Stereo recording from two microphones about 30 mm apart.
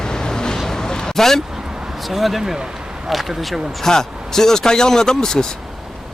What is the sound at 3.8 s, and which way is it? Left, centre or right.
Speech, centre.